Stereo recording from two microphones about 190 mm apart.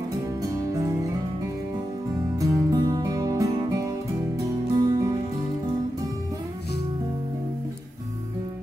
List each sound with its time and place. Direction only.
2.4 s music: 20° right (ahead or behind)